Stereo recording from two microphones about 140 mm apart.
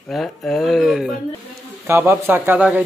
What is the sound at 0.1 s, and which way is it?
Speech, 5° left (ahead or behind).